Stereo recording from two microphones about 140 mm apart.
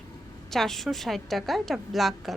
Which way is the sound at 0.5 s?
Centre (ahead or behind).